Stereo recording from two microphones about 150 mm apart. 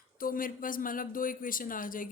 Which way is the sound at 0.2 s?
70° left (ahead or behind).